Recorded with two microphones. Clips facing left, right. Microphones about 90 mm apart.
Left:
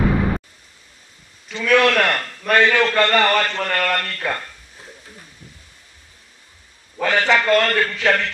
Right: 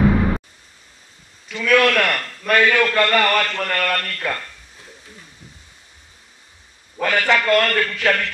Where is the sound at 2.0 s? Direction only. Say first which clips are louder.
Left 1 dB; 25° left (ahead or behind).